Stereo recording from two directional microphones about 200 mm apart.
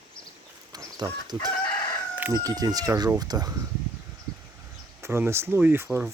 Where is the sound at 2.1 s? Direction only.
15° right (ahead or behind).